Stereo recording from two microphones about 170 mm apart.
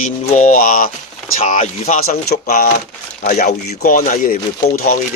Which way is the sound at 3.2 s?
50° left (ahead or behind).